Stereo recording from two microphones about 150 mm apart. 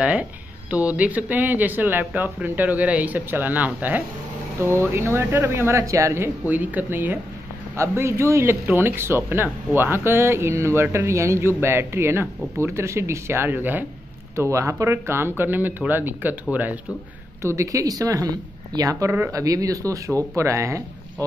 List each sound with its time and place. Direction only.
0.0 s speech: 10° right (ahead or behind)
17.4 s speech: 20° right (ahead or behind)